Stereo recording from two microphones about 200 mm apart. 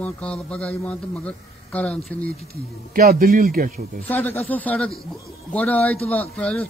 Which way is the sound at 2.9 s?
45° right (ahead or behind).